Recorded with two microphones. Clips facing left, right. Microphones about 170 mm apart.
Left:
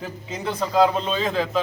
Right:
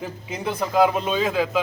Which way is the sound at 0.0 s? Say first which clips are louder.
Right 1 dB; 15° right (ahead or behind).